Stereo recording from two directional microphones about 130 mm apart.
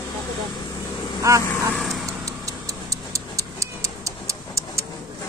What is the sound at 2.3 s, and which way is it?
Clock, 25° right (ahead or behind).